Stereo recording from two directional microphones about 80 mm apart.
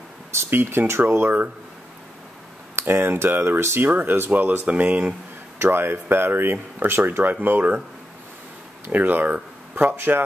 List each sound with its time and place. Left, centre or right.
0.3 s speech: right
2.8 s speech: right
5.6 s speech: right
8.8 s speech: right